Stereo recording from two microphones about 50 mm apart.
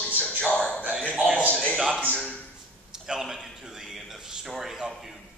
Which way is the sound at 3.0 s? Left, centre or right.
Centre.